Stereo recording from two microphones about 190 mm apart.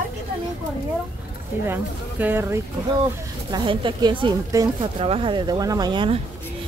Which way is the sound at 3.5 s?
25° right (ahead or behind).